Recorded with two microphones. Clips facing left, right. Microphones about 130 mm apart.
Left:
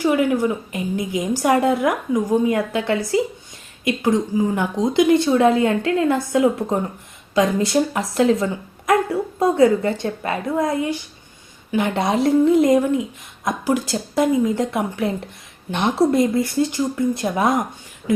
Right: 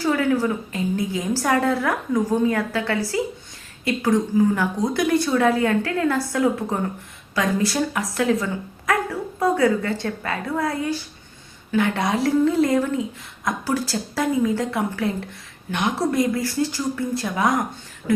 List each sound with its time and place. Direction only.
0.0 s a woman's voice: 15° left (ahead or behind)